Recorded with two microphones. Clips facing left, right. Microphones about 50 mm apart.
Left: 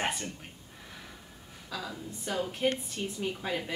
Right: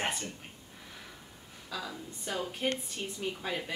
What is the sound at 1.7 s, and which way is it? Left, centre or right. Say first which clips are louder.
Speech: left 1 dB; centre.